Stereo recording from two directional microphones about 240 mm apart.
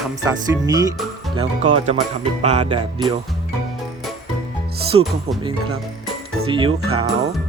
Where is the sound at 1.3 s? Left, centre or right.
Right.